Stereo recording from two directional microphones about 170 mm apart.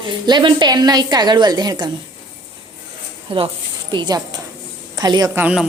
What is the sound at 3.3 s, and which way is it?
A woman's voice, 35° right (ahead or behind).